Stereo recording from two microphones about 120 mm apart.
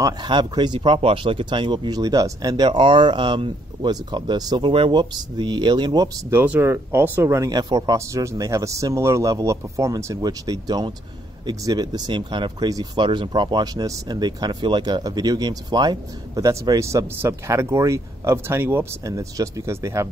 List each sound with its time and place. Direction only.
0.0 s speech: 40° right (ahead or behind)
6.3 s speech: 15° right (ahead or behind)